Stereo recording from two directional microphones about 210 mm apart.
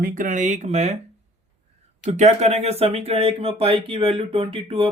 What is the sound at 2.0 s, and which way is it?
Speech, 35° right (ahead or behind).